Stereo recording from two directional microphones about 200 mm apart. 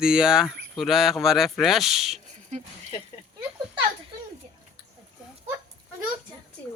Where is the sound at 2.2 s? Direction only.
35° right (ahead or behind).